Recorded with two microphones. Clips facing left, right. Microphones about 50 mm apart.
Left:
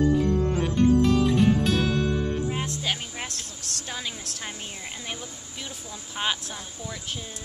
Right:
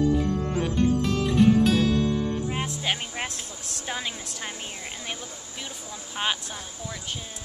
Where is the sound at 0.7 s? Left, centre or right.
Centre.